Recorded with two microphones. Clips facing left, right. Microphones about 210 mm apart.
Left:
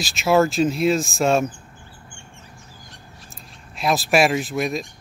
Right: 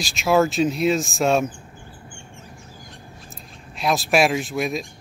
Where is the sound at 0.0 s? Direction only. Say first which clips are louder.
Left 1 dB; centre (ahead or behind).